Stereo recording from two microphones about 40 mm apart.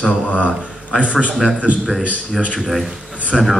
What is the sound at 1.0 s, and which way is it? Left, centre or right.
Speech, right.